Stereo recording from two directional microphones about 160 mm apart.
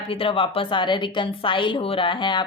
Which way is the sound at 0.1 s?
35° left (ahead or behind).